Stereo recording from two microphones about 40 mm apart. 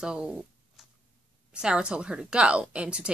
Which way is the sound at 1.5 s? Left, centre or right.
Right.